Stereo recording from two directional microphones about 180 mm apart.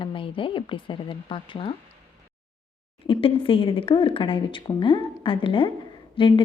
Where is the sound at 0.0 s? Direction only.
30° left (ahead or behind).